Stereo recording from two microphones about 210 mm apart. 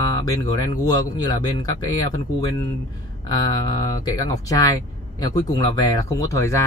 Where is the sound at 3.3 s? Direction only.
20° left (ahead or behind).